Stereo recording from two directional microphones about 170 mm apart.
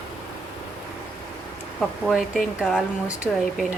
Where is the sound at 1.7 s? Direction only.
Centre (ahead or behind).